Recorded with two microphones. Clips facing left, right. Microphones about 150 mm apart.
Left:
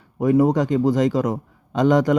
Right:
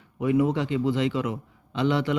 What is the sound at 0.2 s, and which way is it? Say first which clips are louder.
A man's voice: left 6 dB; 40° left (ahead or behind).